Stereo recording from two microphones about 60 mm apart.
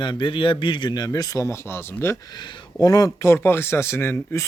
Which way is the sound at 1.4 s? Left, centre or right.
Left.